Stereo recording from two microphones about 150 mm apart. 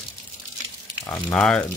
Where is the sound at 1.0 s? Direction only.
15° left (ahead or behind).